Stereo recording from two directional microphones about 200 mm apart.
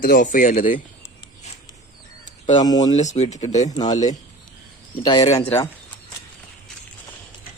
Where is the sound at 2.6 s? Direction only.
20° left (ahead or behind).